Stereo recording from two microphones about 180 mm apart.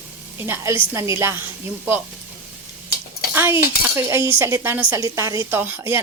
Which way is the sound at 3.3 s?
15° right (ahead or behind).